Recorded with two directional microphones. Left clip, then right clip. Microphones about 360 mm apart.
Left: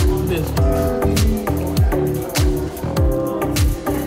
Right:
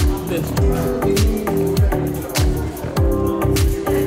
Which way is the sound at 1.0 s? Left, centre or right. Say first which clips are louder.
Right 1 dB; centre.